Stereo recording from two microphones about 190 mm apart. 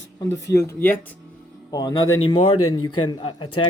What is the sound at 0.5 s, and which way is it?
Speech, 15° left (ahead or behind).